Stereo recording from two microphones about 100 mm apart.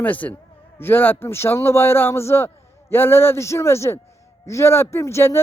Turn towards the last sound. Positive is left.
turn(degrees=30)  # may be behind; listen again after turning